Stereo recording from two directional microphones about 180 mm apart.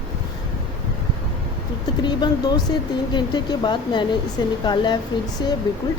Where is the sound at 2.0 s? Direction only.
25° left (ahead or behind).